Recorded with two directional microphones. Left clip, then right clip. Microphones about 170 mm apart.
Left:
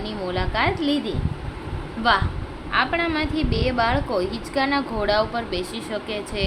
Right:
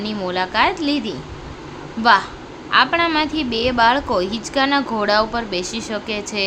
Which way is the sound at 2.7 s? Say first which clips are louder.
Right 6 dB; 20° right (ahead or behind).